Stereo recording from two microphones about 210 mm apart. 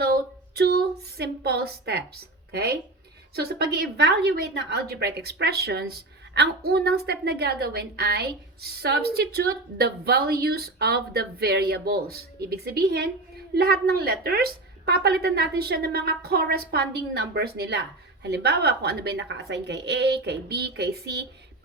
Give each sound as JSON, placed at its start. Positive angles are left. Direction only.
{"t": 0.5, "sound": "a woman's voice", "side_deg": -50}